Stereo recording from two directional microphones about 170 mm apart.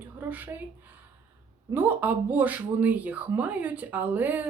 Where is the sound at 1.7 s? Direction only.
10° right (ahead or behind).